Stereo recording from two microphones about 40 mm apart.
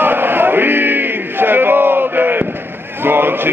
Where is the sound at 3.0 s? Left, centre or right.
Right.